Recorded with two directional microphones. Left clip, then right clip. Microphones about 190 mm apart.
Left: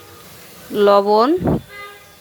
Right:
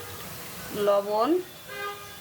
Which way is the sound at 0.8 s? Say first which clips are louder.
Left 11 dB; 50° left (ahead or behind).